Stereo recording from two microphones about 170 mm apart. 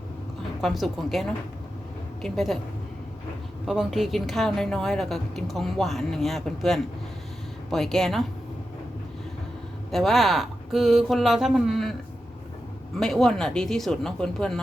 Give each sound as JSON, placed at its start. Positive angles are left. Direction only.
{"t": 0.6, "sound": "a woman's voice", "side_deg": 0}
{"t": 3.7, "sound": "a woman's voice", "side_deg": 0}
{"t": 9.9, "sound": "a woman's voice", "side_deg": 0}
{"t": 13.0, "sound": "a woman's voice", "side_deg": 0}